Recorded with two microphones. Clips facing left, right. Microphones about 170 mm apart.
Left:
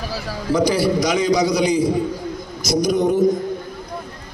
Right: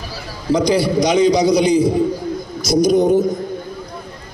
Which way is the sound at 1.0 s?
25° right (ahead or behind).